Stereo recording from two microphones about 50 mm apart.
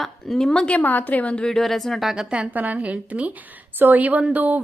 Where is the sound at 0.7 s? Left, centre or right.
Left.